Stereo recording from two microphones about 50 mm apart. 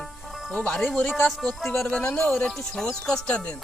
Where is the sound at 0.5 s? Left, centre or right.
Centre.